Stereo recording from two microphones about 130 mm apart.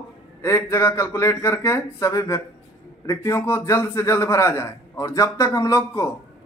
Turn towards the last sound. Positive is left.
turn(degrees=25)  # may be behind; listen again after turning